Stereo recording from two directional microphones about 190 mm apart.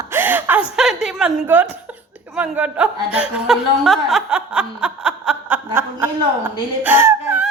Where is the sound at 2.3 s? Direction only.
5° right (ahead or behind).